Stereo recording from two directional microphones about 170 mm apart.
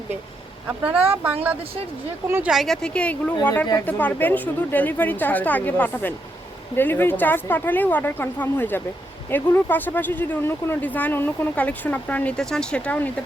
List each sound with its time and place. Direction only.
1.1 s speech: 10° right (ahead or behind); by 13.1 s 5° left (ahead or behind)